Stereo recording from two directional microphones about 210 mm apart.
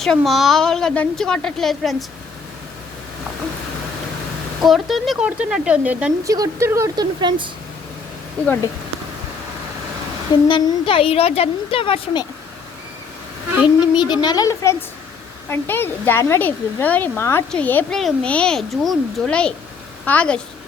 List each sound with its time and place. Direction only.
0.0 s a woman's voice: centre (ahead or behind)
4.6 s a woman's voice: centre (ahead or behind)
6.2 s speech: 15° right (ahead or behind)
8.4 s speech: 5° left (ahead or behind)
10.5 s a woman's voice: 25° left (ahead or behind)
14.1 s a woman's voice: 20° left (ahead or behind)